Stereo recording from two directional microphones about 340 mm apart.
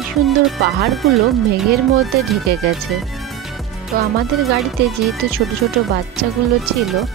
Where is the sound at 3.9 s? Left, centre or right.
Right.